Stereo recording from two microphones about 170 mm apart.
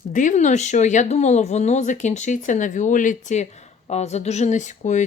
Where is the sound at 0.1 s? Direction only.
50° left (ahead or behind).